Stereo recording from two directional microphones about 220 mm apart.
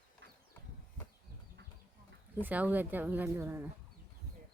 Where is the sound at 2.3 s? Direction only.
10° right (ahead or behind).